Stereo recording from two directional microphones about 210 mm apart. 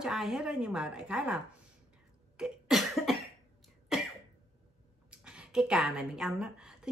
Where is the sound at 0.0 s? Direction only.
Centre (ahead or behind).